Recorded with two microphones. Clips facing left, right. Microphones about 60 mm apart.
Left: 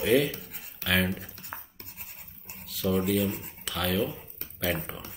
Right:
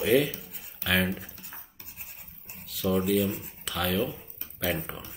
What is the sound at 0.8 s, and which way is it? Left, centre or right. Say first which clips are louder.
Speech: even; centre.